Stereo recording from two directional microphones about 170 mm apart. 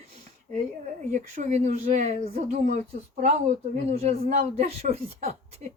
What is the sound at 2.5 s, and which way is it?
Speech, 50° right (ahead or behind).